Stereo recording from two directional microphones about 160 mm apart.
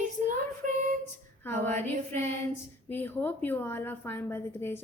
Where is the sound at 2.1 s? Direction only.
45° right (ahead or behind).